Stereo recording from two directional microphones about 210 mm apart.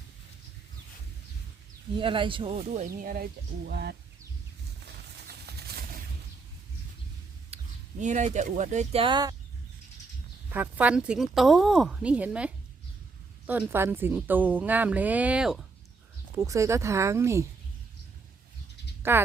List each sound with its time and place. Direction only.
2.0 s speech: 25° right (ahead or behind); by 3.9 s 50° right (ahead or behind)
4.9 s a sound: 50° right (ahead or behind)
7.5 s speech: 35° right (ahead or behind)
10.5 s speech: 10° right (ahead or behind)
16.3 s speech: 15° right (ahead or behind)
19.1 s speech: 10° right (ahead or behind)